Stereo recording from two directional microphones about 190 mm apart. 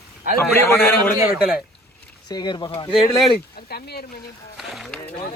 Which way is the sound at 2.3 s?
20° left (ahead or behind).